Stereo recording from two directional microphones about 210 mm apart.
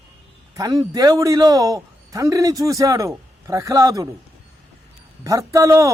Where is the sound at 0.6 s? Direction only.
15° right (ahead or behind).